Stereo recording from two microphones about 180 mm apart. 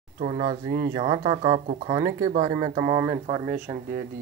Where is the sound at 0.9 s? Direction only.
25° right (ahead or behind).